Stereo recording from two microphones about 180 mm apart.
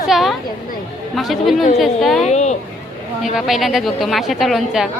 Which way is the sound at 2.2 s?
40° left (ahead or behind).